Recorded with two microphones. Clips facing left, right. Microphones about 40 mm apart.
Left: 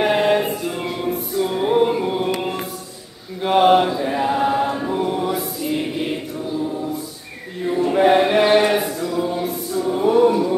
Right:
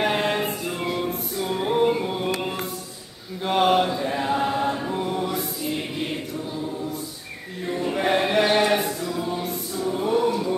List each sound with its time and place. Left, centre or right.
0.0 s music: centre
3.4 s a sound: centre
3.9 s chant: centre
7.9 s a sound: centre
8.7 s chant: centre
9.3 s choir: centre
10.0 s chant: centre